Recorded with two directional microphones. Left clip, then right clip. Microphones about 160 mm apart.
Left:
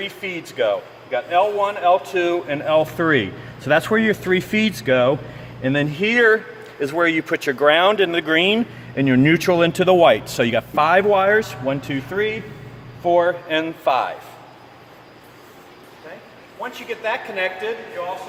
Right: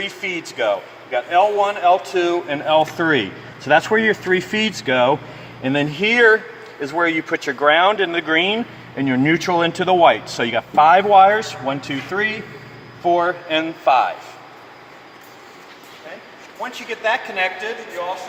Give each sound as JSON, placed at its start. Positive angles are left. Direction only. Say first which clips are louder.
{"t": 0.0, "sound": "speech", "louder": "right 3 dB", "side_deg": 15}
{"t": 6.8, "sound": "speech", "louder": "even", "side_deg": 45}
{"t": 17.0, "sound": "speech", "louder": "right 4 dB", "side_deg": 15}